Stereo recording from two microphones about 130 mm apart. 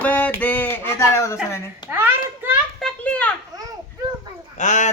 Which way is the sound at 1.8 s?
15° right (ahead or behind).